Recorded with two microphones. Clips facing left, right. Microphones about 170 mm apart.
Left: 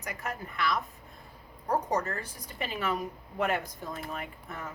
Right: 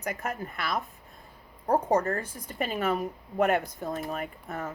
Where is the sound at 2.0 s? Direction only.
50° right (ahead or behind).